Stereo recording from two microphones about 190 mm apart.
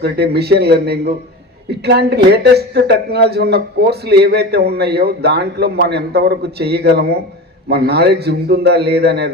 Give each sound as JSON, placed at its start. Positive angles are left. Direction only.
{"t": 0.0, "sound": "a man's voice", "side_deg": -60}